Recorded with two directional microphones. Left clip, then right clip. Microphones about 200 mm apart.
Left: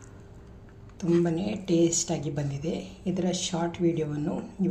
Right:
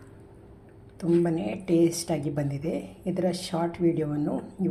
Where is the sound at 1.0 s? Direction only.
10° right (ahead or behind).